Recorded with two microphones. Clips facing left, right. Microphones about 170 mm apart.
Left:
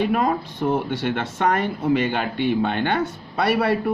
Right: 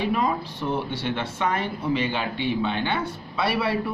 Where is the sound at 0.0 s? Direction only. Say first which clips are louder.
Left 3 dB; 50° left (ahead or behind).